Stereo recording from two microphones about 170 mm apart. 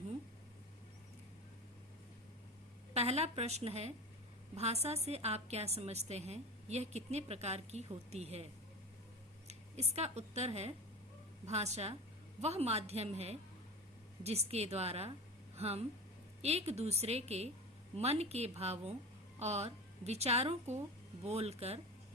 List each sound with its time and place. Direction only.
2.9 s a woman's voice: 40° right (ahead or behind)
9.5 s a woman's voice: 40° right (ahead or behind)